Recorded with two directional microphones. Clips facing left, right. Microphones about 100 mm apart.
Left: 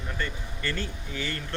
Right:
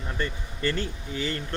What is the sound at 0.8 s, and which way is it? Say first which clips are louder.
Speech: right 3 dB; 25° right (ahead or behind).